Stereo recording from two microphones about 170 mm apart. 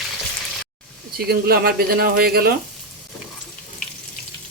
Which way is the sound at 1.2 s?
65° right (ahead or behind).